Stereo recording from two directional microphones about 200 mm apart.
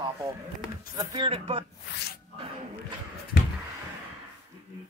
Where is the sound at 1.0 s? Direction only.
20° right (ahead or behind).